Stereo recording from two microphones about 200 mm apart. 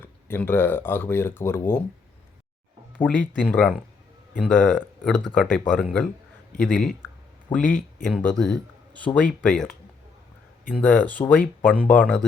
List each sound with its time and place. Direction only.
0.0 s speech: 10° left (ahead or behind)
3.0 s speech: 5° left (ahead or behind)
7.5 s speech: 20° left (ahead or behind)
8.0 s speech: 5° left (ahead or behind)
9.1 s speech: 20° left (ahead or behind)
9.4 s speech: 5° left (ahead or behind)
10.8 s speech: 5° left (ahead or behind)